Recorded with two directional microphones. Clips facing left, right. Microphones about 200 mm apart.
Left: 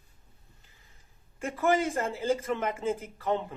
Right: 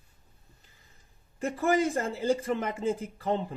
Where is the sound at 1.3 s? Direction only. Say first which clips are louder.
Right 1 dB; 35° right (ahead or behind).